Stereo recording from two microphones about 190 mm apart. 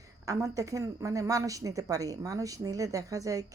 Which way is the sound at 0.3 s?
15° right (ahead or behind).